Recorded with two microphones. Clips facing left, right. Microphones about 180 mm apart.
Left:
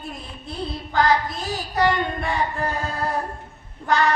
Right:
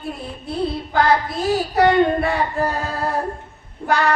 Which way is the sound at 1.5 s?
65° right (ahead or behind).